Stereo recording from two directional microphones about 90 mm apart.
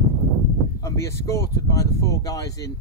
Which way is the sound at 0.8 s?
30° left (ahead or behind).